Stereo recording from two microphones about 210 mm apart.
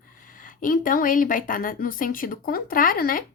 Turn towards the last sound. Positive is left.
turn(degrees=40)  # may be behind; listen again after turning